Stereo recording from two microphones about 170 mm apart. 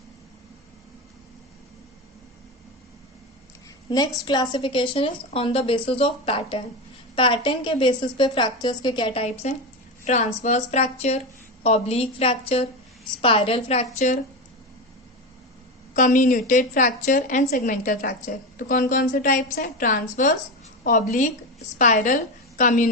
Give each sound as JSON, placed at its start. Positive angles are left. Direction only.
{"t": 3.8, "sound": "a woman's voice", "side_deg": 20}
{"t": 10.1, "sound": "a woman's voice", "side_deg": 45}
{"t": 16.0, "sound": "a woman's voice", "side_deg": 50}